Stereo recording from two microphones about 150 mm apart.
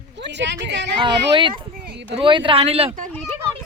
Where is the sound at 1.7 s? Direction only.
90° right.